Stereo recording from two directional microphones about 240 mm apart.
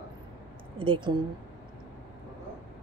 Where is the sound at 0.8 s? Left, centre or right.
Right.